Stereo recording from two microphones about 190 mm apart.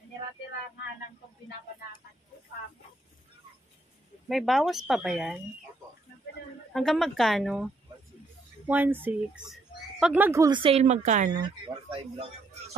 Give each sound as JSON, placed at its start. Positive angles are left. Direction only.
{"t": 4.3, "sound": "speech", "side_deg": 0}
{"t": 6.7, "sound": "speech", "side_deg": 0}
{"t": 11.3, "sound": "speech", "side_deg": -25}